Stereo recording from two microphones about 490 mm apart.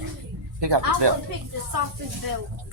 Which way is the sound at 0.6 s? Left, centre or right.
Right.